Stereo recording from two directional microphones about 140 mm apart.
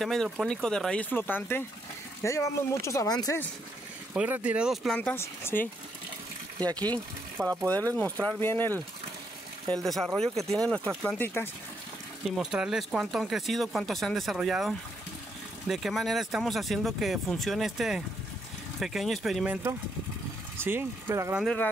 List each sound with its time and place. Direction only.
0.0 s speech: centre (ahead or behind); by 3.3 s 25° left (ahead or behind)
4.1 s speech: 10° right (ahead or behind)
4.9 s speech: 10° left (ahead or behind)
7.4 s speech: 10° right (ahead or behind)
7.9 s speech: 10° left (ahead or behind)
9.8 s speech: centre (ahead or behind)
12.4 s speech: 5° right (ahead or behind)
19.4 s speech: 10° right (ahead or behind)